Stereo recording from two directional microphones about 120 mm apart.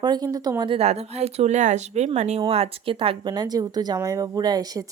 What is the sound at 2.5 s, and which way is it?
Speech, 55° right (ahead or behind).